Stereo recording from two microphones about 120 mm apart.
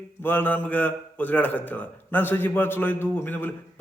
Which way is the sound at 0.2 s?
15° left (ahead or behind).